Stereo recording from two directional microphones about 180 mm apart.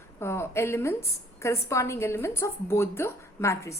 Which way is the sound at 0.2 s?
15° left (ahead or behind).